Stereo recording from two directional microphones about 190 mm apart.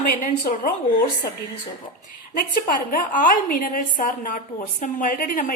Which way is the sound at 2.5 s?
45° left (ahead or behind).